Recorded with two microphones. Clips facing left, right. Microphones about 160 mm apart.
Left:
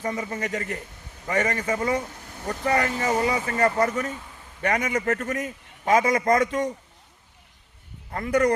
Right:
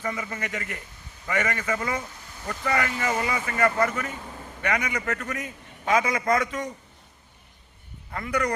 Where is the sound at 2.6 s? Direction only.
35° left (ahead or behind).